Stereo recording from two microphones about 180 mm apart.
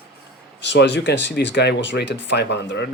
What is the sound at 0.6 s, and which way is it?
Speech, 75° left (ahead or behind).